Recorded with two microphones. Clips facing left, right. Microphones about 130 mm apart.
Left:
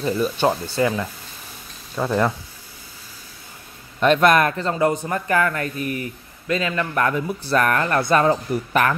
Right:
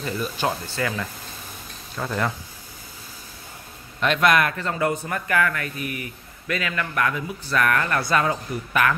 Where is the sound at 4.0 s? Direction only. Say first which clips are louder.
Left 4 dB; 40° left (ahead or behind).